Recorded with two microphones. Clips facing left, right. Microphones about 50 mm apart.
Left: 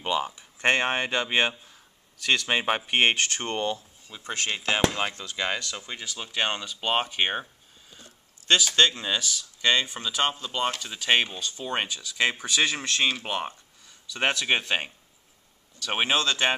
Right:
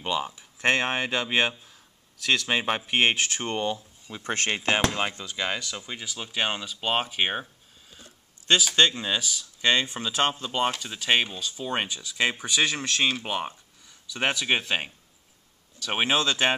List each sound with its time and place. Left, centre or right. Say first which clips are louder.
0.0 s speech: left 1 dB; centre
4.9 s speech: even; centre
11.9 s speech: even; centre
12.6 s speech: even; centre